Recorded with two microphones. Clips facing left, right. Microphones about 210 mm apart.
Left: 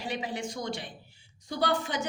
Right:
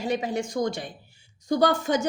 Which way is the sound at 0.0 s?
45° right (ahead or behind).